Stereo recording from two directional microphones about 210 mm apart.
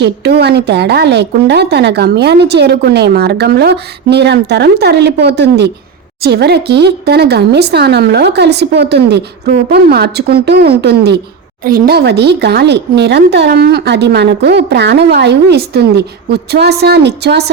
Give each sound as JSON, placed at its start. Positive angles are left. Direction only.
{"t": 0.0, "sound": "speech", "side_deg": -50}